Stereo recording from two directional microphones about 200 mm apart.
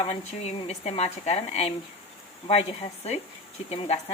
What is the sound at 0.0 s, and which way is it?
A woman's voice, 30° left (ahead or behind).